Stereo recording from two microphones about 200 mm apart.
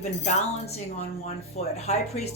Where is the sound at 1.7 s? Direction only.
35° left (ahead or behind).